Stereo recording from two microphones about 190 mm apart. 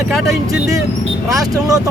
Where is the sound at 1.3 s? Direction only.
20° right (ahead or behind).